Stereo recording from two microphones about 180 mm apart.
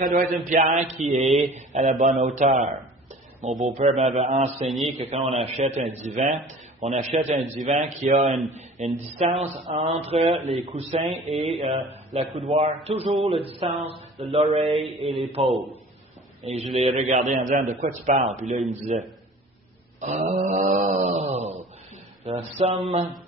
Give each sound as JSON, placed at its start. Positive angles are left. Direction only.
{"t": 0.0, "sound": "mantra", "side_deg": -45}
{"t": 3.7, "sound": "mantra", "side_deg": -40}
{"t": 15.0, "sound": "a man's voice", "side_deg": 0}
{"t": 16.4, "sound": "mantra", "side_deg": -35}
{"t": 16.8, "sound": "a man's voice", "side_deg": -45}
{"t": 18.7, "sound": "mantra", "side_deg": -40}
{"t": 20.0, "sound": "a sound", "side_deg": -40}
{"t": 22.2, "sound": "mantra", "side_deg": -35}